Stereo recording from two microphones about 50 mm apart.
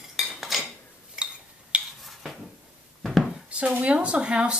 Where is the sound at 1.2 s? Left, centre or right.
Centre.